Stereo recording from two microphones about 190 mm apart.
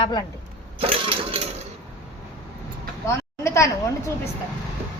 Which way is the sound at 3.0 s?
15° left (ahead or behind).